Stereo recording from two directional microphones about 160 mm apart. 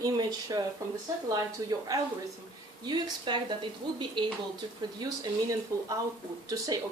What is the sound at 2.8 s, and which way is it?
Speech, 30° right (ahead or behind).